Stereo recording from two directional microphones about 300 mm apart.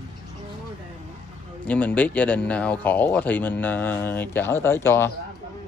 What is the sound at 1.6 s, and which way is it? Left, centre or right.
Speech, centre.